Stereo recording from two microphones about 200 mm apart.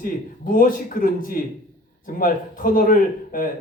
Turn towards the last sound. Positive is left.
turn(degrees=45)  # may be behind; listen again after turning